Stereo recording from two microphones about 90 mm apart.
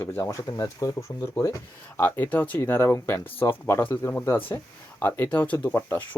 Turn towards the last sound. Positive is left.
turn(degrees=25)  # may be behind; listen again after turning